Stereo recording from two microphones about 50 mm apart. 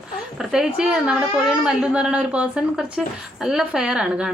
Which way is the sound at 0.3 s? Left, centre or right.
Centre.